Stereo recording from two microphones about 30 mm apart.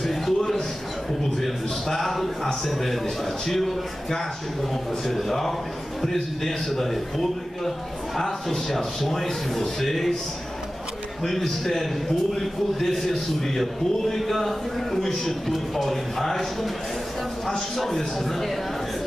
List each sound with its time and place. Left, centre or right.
0.0 s a sound: centre
1.4 s a man's voice: centre
5.0 s a man's voice: centre
11.2 s a man's voice: centre
13.1 s a man's voice: centre
17.7 s a man's voice: centre